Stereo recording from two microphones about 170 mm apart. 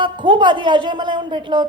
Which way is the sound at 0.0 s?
30° right (ahead or behind).